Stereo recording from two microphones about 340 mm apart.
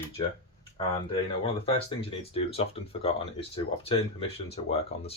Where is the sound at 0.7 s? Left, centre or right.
Centre.